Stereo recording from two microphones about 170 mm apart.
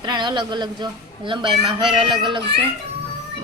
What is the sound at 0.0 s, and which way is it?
A woman's voice, 25° right (ahead or behind).